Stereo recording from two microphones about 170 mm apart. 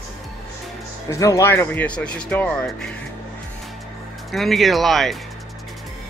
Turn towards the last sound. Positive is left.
turn(degrees=0)  # may be behind; listen again after turning